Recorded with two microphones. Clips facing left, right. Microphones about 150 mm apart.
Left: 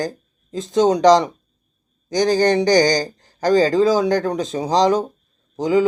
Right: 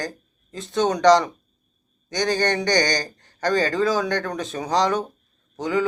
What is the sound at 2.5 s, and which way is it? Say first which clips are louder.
Speech: left 7 dB; 25° left (ahead or behind).